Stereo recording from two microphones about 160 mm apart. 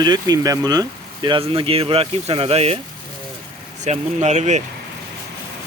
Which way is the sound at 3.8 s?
45° right (ahead or behind).